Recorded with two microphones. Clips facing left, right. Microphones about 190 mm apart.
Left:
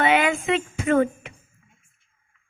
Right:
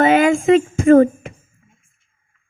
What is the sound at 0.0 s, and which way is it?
Speech, 45° right (ahead or behind).